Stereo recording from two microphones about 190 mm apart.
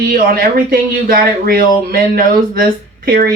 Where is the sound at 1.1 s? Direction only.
50° right (ahead or behind).